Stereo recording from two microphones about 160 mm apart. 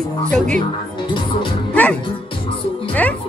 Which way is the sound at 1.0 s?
30° left (ahead or behind).